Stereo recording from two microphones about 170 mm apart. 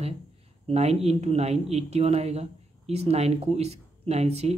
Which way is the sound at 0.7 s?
40° right (ahead or behind).